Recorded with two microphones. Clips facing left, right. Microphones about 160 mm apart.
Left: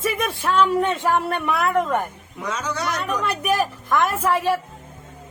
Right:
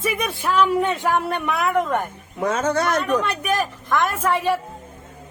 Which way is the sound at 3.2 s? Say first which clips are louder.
Left 1 dB; 5° left (ahead or behind).